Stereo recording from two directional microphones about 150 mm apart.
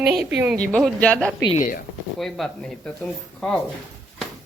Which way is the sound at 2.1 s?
Centre (ahead or behind).